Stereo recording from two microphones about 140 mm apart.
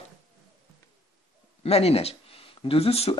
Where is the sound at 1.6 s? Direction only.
45° left (ahead or behind).